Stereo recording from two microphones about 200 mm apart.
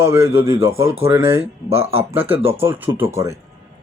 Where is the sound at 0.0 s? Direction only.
15° right (ahead or behind).